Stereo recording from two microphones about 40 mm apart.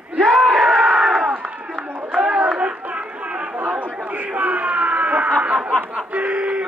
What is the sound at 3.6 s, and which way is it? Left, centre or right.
Chatter, right.